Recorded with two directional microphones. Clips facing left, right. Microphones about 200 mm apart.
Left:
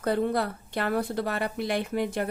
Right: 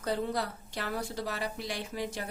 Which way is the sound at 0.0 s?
55° left (ahead or behind).